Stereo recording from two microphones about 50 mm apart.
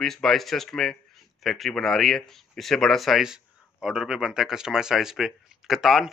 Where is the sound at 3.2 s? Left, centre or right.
Centre.